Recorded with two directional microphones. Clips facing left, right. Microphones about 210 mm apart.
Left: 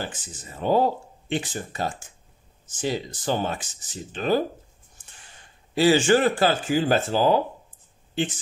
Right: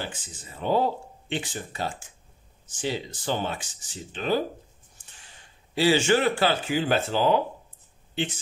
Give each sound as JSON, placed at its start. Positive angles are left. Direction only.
{"t": 0.0, "sound": "speech", "side_deg": 45}
{"t": 5.8, "sound": "speech", "side_deg": 45}